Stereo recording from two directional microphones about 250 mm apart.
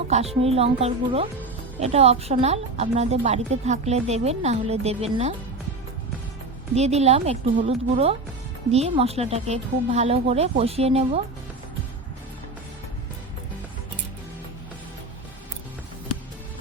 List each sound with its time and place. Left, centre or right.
0.1 s a woman's voice: right
6.7 s a woman's voice: right